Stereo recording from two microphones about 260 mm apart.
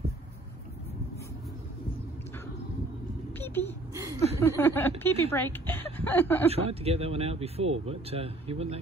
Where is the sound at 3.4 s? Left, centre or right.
Centre.